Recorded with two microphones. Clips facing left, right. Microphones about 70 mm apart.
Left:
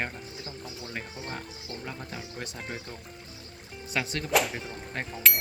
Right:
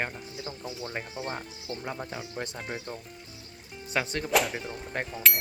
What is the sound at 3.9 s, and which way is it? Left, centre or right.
Speech, right.